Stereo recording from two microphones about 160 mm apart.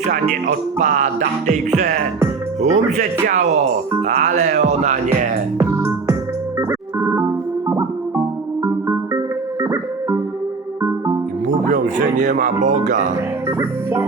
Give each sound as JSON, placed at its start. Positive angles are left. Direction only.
{"t": 0.0, "sound": "speech", "side_deg": -50}
{"t": 5.5, "sound": "music", "side_deg": -15}
{"t": 6.6, "sound": "organ", "side_deg": -15}
{"t": 7.7, "sound": "music", "side_deg": -15}
{"t": 11.4, "sound": "speech", "side_deg": -50}